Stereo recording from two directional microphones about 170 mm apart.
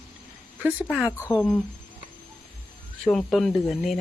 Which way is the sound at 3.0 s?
Centre (ahead or behind).